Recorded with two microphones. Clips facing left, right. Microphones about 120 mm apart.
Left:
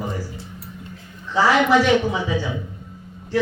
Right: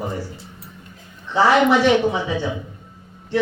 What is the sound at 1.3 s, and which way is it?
Speech, 25° right (ahead or behind).